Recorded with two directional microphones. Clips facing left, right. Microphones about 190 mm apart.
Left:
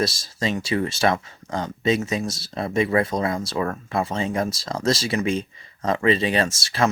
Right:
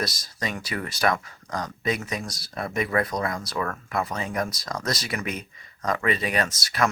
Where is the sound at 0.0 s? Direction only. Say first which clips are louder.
Left 6 dB; 25° left (ahead or behind).